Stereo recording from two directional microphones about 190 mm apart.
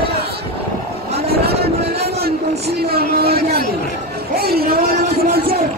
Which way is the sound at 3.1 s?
55° right (ahead or behind).